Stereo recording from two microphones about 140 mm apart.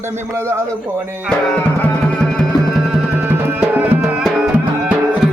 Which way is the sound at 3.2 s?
15° right (ahead or behind).